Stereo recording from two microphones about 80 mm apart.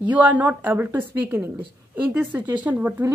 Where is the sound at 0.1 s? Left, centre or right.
Centre.